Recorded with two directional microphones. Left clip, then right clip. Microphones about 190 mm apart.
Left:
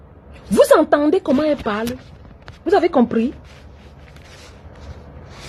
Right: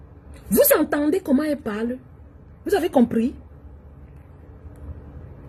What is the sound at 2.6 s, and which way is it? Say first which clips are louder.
Speech: left 6 dB; 20° right (ahead or behind).